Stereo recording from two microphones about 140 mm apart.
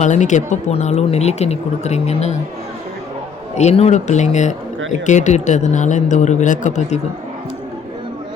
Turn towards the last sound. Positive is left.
turn(degrees=60)  # may be behind; listen again after turning